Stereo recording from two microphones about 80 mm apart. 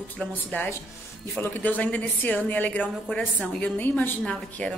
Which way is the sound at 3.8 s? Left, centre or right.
Left.